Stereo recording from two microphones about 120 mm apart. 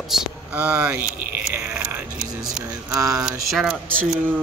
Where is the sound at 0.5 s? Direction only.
10° right (ahead or behind).